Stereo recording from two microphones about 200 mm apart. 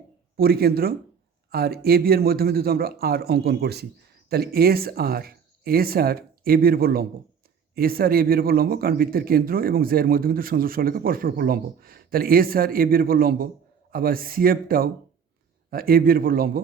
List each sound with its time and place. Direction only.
0.3 s speech: 50° right (ahead or behind)